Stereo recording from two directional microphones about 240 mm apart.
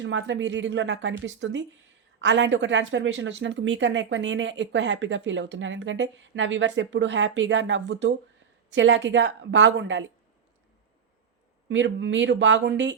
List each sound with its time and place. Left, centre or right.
0.0 s a woman's voice: right
11.7 s a woman's voice: right